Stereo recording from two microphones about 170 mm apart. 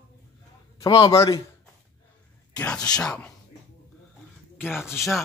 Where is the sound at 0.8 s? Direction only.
20° left (ahead or behind).